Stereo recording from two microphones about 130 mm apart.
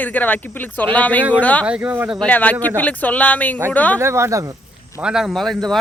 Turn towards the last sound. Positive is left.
turn(degrees=0)  # may be behind; listen again after turning